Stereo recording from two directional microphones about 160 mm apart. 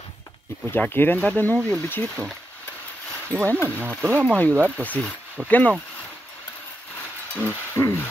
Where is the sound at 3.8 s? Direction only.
15° right (ahead or behind).